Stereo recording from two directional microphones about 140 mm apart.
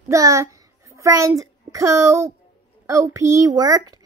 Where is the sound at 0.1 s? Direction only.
20° right (ahead or behind).